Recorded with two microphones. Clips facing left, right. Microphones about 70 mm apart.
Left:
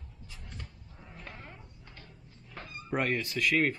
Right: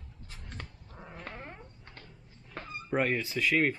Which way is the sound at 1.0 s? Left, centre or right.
Right.